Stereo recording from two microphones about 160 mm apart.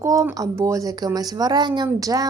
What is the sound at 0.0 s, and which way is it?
Speech, 20° right (ahead or behind).